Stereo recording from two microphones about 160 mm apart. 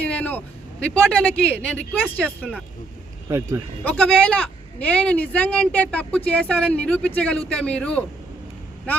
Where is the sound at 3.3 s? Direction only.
15° right (ahead or behind).